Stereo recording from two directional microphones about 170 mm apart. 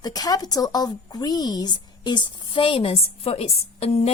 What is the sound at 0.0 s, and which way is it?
A woman's voice, 20° left (ahead or behind).